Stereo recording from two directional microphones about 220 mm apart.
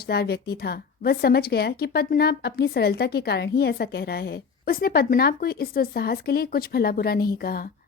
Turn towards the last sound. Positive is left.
turn(degrees=45)  # may be behind; listen again after turning